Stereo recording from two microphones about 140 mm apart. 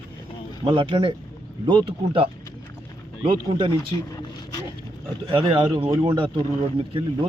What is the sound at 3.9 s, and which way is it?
Speech, 25° left (ahead or behind).